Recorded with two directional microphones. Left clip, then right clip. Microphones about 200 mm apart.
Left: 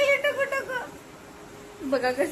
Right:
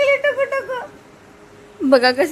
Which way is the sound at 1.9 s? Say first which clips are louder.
Right 11 dB; 55° right (ahead or behind).